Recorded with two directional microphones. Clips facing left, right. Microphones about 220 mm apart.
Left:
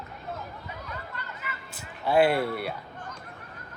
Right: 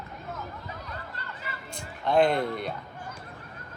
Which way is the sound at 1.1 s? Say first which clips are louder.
Left 1 dB; 35° right (ahead or behind).